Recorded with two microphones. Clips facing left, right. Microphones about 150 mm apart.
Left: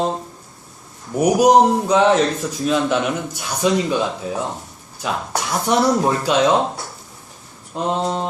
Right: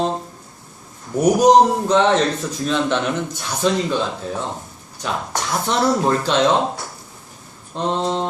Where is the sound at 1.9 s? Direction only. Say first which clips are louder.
Left 1 dB; 5° left (ahead or behind).